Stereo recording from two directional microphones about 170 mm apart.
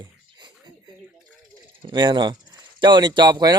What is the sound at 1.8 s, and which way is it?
Speech, 25° right (ahead or behind).